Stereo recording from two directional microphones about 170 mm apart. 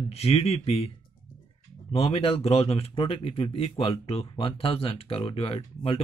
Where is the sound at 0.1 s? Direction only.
35° left (ahead or behind).